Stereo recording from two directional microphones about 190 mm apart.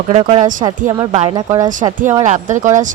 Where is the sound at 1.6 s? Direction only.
45° right (ahead or behind).